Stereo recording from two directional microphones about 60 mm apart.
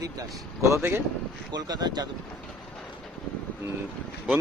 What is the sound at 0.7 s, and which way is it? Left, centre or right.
Speech, right.